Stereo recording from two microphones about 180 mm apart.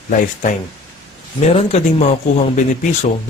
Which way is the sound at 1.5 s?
35° left (ahead or behind).